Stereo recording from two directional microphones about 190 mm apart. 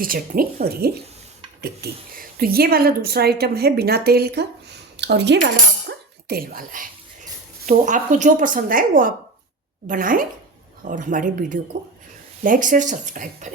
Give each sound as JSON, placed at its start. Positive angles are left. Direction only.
{"t": 0.0, "sound": "a woman's voice", "side_deg": -50}
{"t": 6.2, "sound": "a woman's voice", "side_deg": -50}